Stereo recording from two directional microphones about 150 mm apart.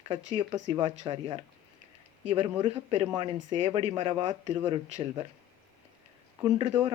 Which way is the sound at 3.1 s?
25° right (ahead or behind).